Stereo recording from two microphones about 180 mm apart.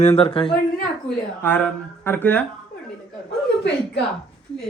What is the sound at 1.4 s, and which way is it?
Speech, 10° left (ahead or behind).